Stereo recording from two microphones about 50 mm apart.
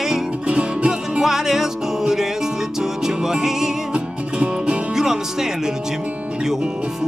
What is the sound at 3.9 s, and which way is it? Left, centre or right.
Music, right.